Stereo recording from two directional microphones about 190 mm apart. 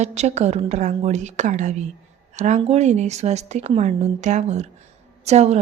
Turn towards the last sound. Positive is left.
turn(degrees=-35)  # may be behind; listen again after turning